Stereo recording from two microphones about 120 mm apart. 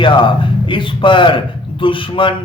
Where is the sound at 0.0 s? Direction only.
45° left (ahead or behind).